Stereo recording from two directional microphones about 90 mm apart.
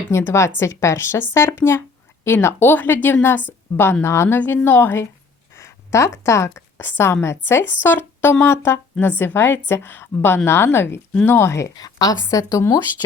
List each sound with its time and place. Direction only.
0.1 s a woman's voice: 30° left (ahead or behind)
5.5 s a sound: 35° left (ahead or behind)
6.2 s a woman's voice: 30° left (ahead or behind)